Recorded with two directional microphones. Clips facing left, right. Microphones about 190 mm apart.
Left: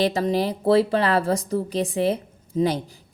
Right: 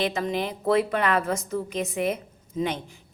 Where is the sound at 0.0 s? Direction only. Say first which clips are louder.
Left 5 dB; 35° left (ahead or behind).